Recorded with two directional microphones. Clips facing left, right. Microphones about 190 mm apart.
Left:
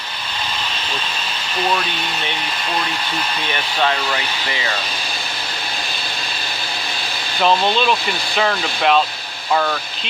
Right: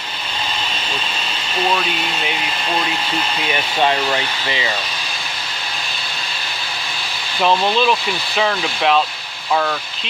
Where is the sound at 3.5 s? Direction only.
15° right (ahead or behind).